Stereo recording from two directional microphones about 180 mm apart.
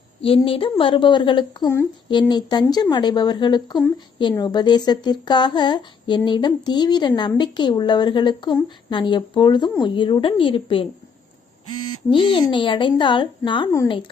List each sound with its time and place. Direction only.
0.2 s speech: 30° left (ahead or behind)
12.1 s speech: 25° left (ahead or behind)